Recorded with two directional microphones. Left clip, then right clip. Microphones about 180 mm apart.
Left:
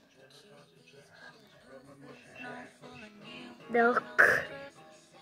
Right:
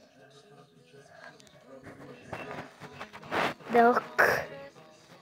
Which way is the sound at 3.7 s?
5° left (ahead or behind).